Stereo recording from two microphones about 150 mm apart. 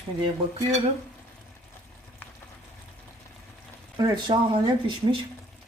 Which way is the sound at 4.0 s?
30° right (ahead or behind).